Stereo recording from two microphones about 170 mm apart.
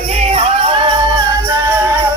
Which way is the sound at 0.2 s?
35° right (ahead or behind).